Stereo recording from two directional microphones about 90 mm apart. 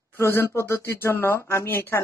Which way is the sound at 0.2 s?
25° left (ahead or behind).